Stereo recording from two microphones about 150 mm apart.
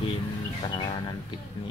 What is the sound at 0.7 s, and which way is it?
Speech, 25° left (ahead or behind).